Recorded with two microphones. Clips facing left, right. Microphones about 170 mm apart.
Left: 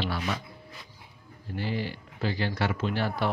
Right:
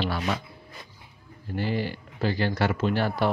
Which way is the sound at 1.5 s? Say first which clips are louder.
Right 4 dB; 50° right (ahead or behind).